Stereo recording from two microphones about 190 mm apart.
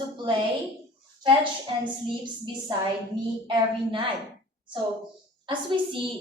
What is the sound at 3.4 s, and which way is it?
Speech, 25° right (ahead or behind).